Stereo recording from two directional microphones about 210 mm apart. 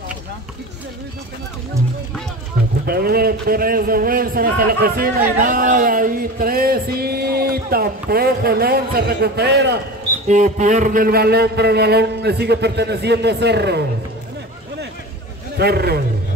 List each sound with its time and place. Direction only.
2.9 s a man's voice: 45° right (ahead or behind)
10.2 s a man's voice: 35° right (ahead or behind); by 13.8 s 55° right (ahead or behind)
15.5 s a man's voice: 50° right (ahead or behind)